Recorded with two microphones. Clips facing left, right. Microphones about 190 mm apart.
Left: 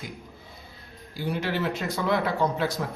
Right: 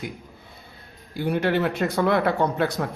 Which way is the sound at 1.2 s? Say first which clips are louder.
Right 6 dB; 55° right (ahead or behind).